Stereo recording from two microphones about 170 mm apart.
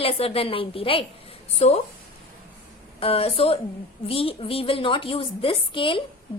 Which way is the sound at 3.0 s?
35° left (ahead or behind).